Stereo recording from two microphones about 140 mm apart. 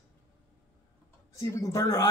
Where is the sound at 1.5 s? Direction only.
25° left (ahead or behind).